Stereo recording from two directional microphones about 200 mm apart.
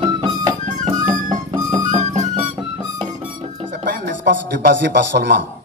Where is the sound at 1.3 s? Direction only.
15° right (ahead or behind).